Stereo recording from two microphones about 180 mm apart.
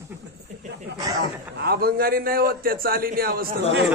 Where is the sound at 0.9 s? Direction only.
75° right (ahead or behind).